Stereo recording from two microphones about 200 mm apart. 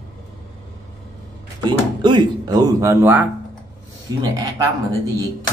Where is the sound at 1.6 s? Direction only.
20° right (ahead or behind).